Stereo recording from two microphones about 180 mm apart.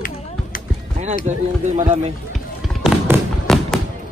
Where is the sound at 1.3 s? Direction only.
40° right (ahead or behind).